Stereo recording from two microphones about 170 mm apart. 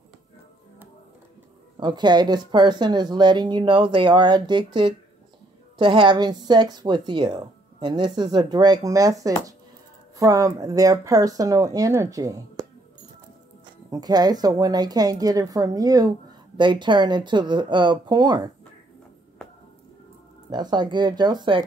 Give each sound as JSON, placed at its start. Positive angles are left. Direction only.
{"t": 1.8, "sound": "a woman's voice", "side_deg": -25}
{"t": 13.8, "sound": "a woman's voice", "side_deg": -20}
{"t": 20.4, "sound": "a woman's voice", "side_deg": -25}